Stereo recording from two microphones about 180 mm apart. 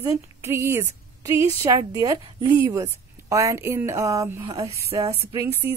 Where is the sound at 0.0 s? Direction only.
15° right (ahead or behind).